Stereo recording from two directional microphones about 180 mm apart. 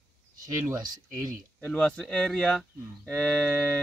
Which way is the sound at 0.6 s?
20° right (ahead or behind).